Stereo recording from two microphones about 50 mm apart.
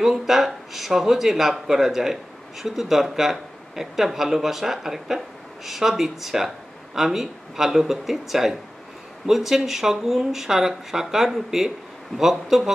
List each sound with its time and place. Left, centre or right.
0.0 s speech: centre